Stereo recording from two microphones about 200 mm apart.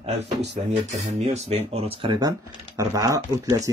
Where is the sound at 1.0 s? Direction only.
35° right (ahead or behind); by 3.5 s 15° right (ahead or behind).